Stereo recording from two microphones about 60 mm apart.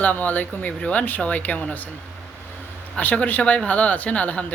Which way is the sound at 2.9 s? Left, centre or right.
Left.